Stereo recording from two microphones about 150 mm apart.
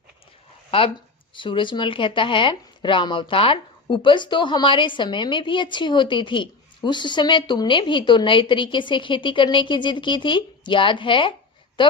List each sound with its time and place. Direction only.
1.4 s speech: 30° left (ahead or behind)